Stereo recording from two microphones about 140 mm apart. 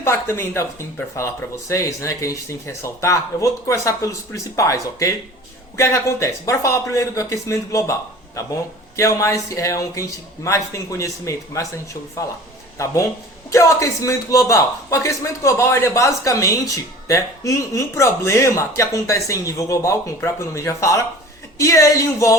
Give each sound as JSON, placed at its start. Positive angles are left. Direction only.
{"t": 0.0, "sound": "a man's voice", "side_deg": 20}
{"t": 9.0, "sound": "a man's voice", "side_deg": 20}
{"t": 12.8, "sound": "a man's voice", "side_deg": 20}